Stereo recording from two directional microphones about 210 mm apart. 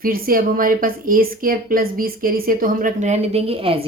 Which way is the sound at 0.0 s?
45° right (ahead or behind).